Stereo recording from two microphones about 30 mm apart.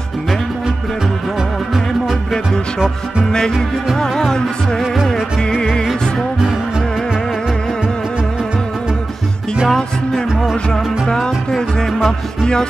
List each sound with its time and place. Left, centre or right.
3.3 s music: left
9.7 s music: centre